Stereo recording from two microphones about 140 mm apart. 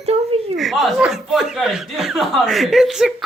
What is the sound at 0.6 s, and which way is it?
Speech, centre (ahead or behind).